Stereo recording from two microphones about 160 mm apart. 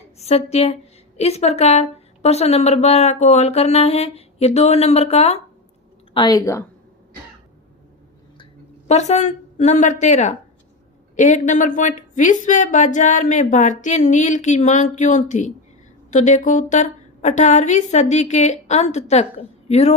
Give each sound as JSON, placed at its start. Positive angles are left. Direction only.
{"t": 0.2, "sound": "a woman's voice", "side_deg": 40}
{"t": 6.1, "sound": "a woman's voice", "side_deg": 25}
{"t": 8.9, "sound": "a woman's voice", "side_deg": 45}